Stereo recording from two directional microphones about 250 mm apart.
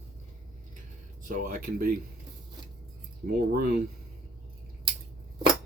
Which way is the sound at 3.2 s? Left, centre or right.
Right.